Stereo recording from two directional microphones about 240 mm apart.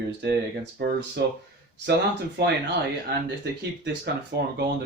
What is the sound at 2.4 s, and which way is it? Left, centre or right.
Speech, right.